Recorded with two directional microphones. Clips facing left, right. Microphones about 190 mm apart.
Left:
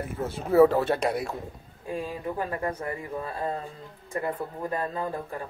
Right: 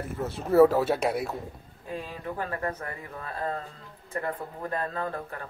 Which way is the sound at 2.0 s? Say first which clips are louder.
Left 3 dB; 15° left (ahead or behind).